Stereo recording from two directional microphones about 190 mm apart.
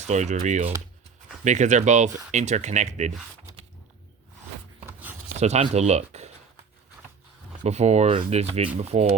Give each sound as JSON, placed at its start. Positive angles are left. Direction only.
{"t": 0.0, "sound": "speech", "side_deg": -35}
{"t": 5.4, "sound": "speech", "side_deg": -35}
{"t": 7.6, "sound": "speech", "side_deg": -35}